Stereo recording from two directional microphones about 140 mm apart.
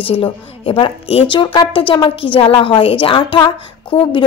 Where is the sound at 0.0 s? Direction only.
40° left (ahead or behind).